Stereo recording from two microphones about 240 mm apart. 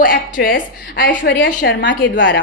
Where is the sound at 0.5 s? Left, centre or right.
Left.